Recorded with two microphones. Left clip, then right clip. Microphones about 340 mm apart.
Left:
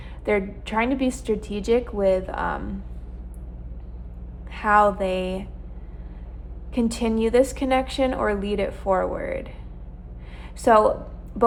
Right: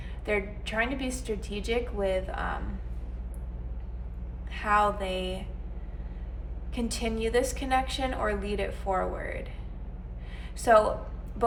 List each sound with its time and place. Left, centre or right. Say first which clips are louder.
0.3 s a woman's voice: left 6 dB; left
4.5 s a woman's voice: left 7 dB; left
6.7 s a woman's voice: left 8 dB; left
10.6 s a woman's voice: left 4 dB; left